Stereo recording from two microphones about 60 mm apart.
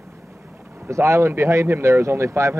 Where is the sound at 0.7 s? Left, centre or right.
Right.